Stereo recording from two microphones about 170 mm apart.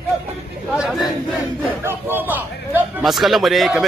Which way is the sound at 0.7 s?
Centre (ahead or behind).